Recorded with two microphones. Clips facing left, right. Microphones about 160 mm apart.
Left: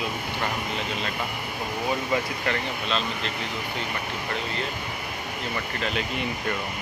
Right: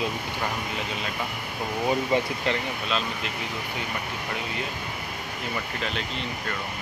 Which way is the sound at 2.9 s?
5° right (ahead or behind).